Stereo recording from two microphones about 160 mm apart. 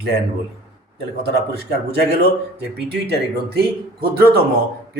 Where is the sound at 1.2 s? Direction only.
90° right.